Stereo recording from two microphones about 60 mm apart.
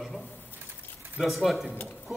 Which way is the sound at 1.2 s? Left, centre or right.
Centre.